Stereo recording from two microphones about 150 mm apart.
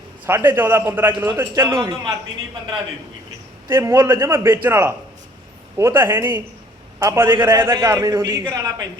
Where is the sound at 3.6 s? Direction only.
20° right (ahead or behind).